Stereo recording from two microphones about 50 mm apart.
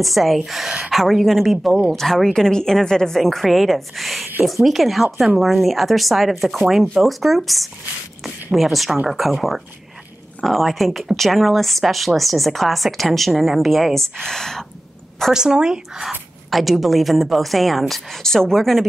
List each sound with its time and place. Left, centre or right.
0.0 s speech: centre
0.7 s speech: centre
0.9 s speech: centre
15.3 s speech: centre
16.4 s speech: centre